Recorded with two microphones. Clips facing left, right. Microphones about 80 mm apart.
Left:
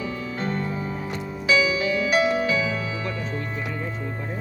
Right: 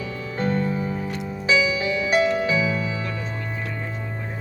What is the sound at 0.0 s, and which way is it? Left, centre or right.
Music, left.